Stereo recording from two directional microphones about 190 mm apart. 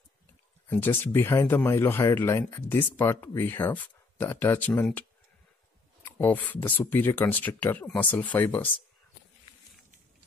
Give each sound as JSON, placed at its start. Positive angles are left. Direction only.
{"t": 0.7, "sound": "speech", "side_deg": 10}
{"t": 6.0, "sound": "speech", "side_deg": 10}